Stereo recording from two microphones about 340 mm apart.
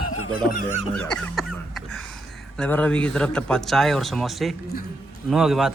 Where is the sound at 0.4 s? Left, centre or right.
Left.